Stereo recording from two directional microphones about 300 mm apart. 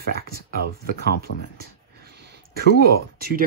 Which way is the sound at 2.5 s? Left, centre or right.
Right.